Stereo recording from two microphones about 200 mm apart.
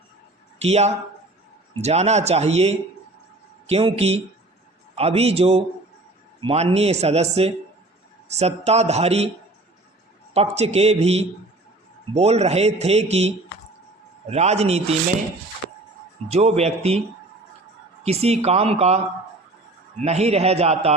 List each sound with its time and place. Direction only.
0.6 s a man's voice: 35° right (ahead or behind)
10.3 s a man's voice: 30° right (ahead or behind)
16.3 s a man's voice: 30° right (ahead or behind)
18.0 s a man's voice: 30° right (ahead or behind)
20.0 s a man's voice: 35° right (ahead or behind)